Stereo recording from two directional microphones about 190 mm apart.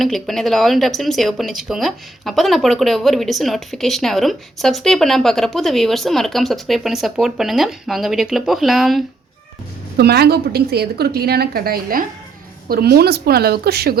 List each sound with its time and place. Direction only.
0.0 s speech: centre (ahead or behind)
10.0 s a woman's voice: 55° right (ahead or behind)